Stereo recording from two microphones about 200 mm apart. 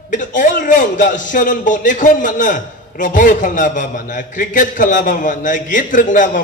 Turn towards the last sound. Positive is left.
turn(degrees=40)  # may be behind; listen again after turning